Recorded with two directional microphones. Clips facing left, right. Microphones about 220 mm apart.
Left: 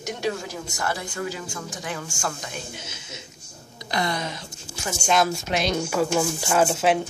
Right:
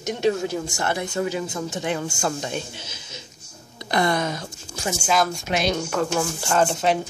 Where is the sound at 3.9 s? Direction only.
55° right (ahead or behind).